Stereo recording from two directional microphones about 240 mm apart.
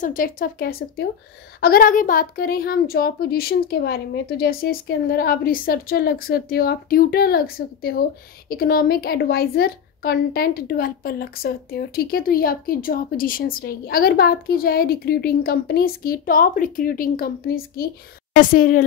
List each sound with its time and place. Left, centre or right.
0.0 s a woman's voice: left